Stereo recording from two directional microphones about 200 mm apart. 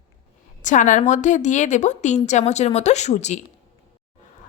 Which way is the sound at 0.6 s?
40° left (ahead or behind).